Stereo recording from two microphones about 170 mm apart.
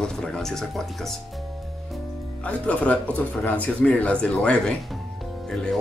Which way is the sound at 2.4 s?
10° left (ahead or behind).